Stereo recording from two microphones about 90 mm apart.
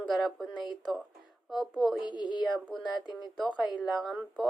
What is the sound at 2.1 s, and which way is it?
Speech, 55° left (ahead or behind).